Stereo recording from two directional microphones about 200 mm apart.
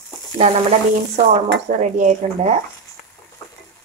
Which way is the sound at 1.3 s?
35° right (ahead or behind).